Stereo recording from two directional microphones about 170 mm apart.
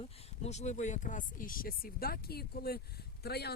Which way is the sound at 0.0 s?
40° left (ahead or behind).